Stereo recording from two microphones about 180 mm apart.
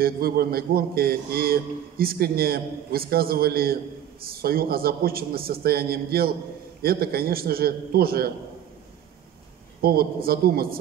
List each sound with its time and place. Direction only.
0.0 s speech: 55° right (ahead or behind)
9.8 s speech: 60° right (ahead or behind)